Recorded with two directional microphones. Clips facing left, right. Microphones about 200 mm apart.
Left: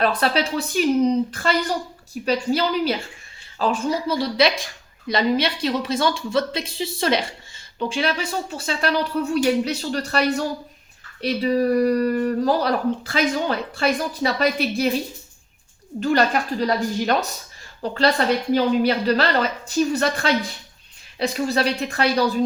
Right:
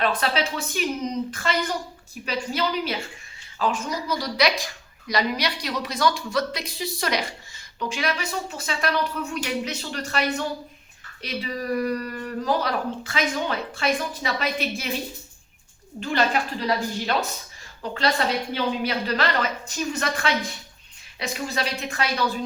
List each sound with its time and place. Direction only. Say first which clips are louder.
0.0 s speech: left 3 dB; 35° left (ahead or behind)
16.0 s speech: left 4 dB; 40° left (ahead or behind)
17.8 s speech: left 5 dB; 35° left (ahead or behind)